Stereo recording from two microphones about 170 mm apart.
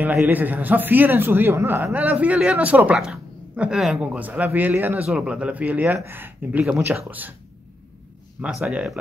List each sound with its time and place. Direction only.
0.2 s speech: 10° right (ahead or behind)
8.4 s speech: 5° right (ahead or behind)